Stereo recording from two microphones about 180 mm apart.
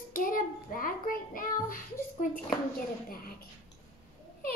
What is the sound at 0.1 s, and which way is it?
Child singing, 50° left (ahead or behind).